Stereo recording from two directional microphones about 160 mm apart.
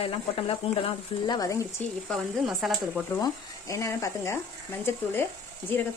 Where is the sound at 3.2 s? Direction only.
20° left (ahead or behind).